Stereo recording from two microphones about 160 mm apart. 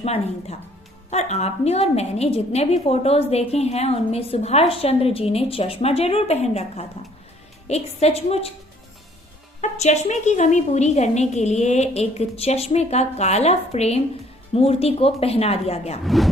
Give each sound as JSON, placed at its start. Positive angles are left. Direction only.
{"t": 0.0, "sound": "a woman's voice", "side_deg": 40}
{"t": 9.6, "sound": "a woman's voice", "side_deg": 45}
{"t": 16.0, "sound": "speech", "side_deg": 0}